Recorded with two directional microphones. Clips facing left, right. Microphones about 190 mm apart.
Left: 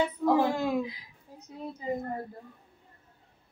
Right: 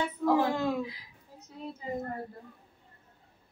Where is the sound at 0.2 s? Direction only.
10° left (ahead or behind).